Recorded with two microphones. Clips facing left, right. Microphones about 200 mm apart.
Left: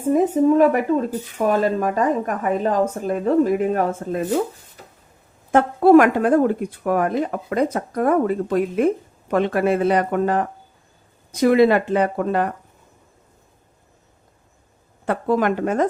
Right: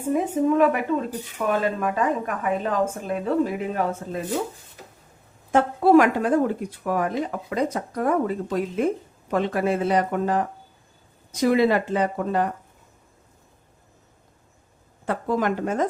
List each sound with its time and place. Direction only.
0.0 s a woman's voice: 40° left (ahead or behind)
5.5 s speech: 55° left (ahead or behind)
15.0 s speech: 65° left (ahead or behind)